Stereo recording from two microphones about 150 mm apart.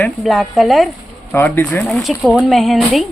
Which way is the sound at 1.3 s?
15° left (ahead or behind).